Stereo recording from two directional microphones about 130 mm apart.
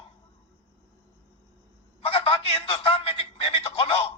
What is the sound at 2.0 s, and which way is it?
Telephone, 45° left (ahead or behind).